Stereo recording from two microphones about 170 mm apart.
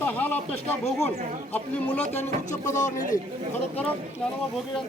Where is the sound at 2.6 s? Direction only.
45° left (ahead or behind).